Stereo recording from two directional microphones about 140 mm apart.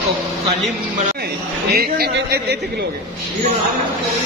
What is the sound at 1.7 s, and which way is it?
Speech, 90° right.